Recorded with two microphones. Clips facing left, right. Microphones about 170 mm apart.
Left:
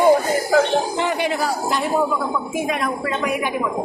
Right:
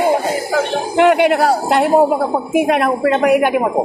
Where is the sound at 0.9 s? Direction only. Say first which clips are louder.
Right 10 dB; 70° right (ahead or behind).